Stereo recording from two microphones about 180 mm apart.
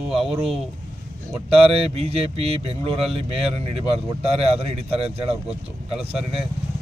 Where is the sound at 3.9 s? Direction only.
35° right (ahead or behind).